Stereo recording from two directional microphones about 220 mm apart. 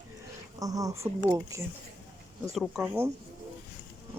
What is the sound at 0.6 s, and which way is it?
Speech, 15° right (ahead or behind).